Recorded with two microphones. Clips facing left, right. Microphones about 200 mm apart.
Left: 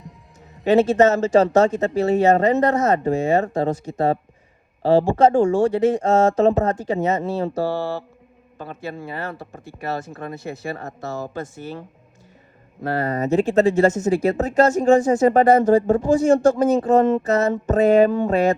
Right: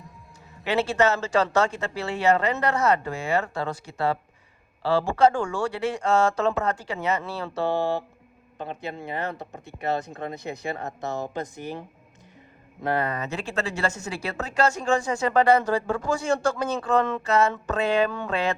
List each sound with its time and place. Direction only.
0.6 s speech: 40° left (ahead or behind)
7.7 s a man's voice: 15° right (ahead or behind)
13.1 s speech: 40° left (ahead or behind)